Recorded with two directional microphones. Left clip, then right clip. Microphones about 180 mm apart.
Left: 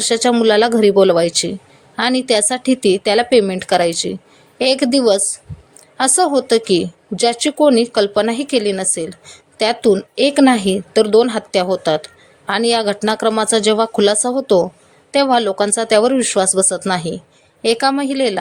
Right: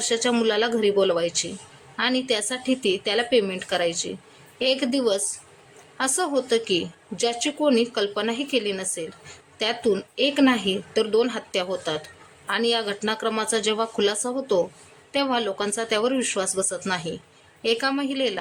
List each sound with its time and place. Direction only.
0.0 s a woman's voice: 30° left (ahead or behind)